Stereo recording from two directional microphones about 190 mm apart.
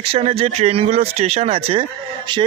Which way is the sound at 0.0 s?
30° right (ahead or behind).